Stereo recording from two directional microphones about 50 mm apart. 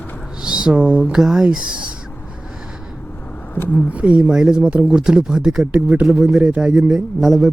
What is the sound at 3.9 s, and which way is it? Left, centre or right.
Speech, right.